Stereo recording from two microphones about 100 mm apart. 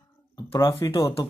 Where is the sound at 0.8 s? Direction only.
40° left (ahead or behind).